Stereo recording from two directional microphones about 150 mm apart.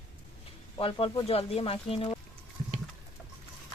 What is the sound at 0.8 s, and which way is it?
Speech, 40° left (ahead or behind).